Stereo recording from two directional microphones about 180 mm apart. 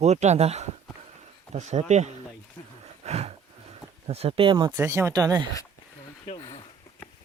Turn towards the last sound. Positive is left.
turn(degrees=35)  # may be behind; listen again after turning